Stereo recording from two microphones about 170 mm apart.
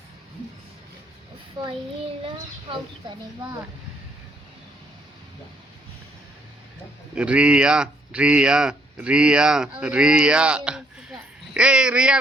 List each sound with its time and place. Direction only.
1.6 s child singing: 25° right (ahead or behind)
7.2 s speech: 5° right (ahead or behind)